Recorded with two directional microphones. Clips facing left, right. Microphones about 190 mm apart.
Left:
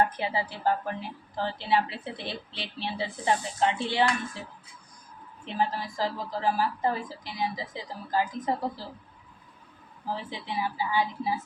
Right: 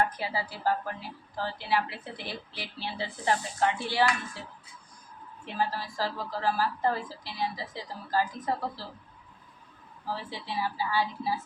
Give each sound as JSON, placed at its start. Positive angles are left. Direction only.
{"t": 0.0, "sound": "a woman's voice", "side_deg": 25}
{"t": 5.5, "sound": "a woman's voice", "side_deg": 20}
{"t": 10.1, "sound": "a woman's voice", "side_deg": 20}